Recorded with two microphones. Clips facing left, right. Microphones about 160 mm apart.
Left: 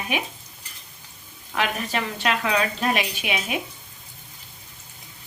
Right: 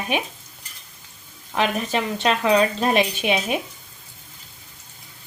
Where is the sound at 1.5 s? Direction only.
25° right (ahead or behind).